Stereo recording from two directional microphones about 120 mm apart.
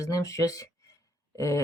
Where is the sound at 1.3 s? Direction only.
25° left (ahead or behind).